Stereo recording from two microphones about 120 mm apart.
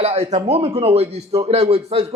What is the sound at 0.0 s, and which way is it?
Speech, 60° right (ahead or behind).